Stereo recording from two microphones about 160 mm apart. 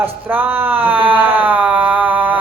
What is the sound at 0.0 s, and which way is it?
Speech, 10° right (ahead or behind).